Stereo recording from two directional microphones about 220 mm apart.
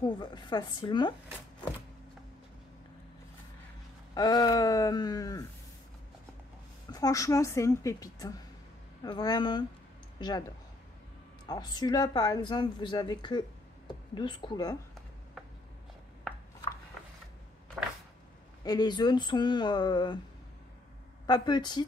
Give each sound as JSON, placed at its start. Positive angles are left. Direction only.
{"t": 0.0, "sound": "speech", "side_deg": 20}
{"t": 4.1, "sound": "a woman's voice", "side_deg": 20}
{"t": 6.9, "sound": "a woman's voice", "side_deg": 15}
{"t": 11.4, "sound": "speech", "side_deg": 20}
{"t": 18.6, "sound": "speech", "side_deg": 20}
{"t": 21.3, "sound": "speech", "side_deg": 20}